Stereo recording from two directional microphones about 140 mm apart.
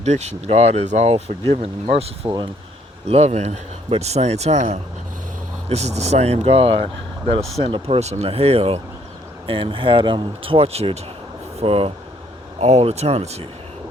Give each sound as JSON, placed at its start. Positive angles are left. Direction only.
{"t": 0.0, "sound": "speech", "side_deg": -55}